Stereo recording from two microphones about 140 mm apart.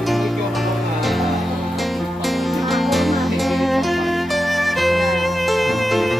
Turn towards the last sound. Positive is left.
turn(degrees=0)  # may be behind; listen again after turning